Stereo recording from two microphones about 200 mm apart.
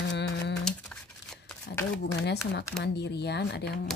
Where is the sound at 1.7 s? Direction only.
55° left (ahead or behind).